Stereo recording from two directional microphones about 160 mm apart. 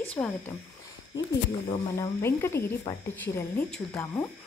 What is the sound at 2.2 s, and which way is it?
A woman's voice, 15° left (ahead or behind).